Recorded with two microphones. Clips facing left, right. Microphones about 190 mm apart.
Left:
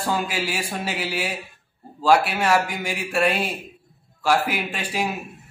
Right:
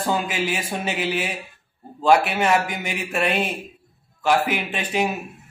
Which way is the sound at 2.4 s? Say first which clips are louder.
Even; 5° left (ahead or behind).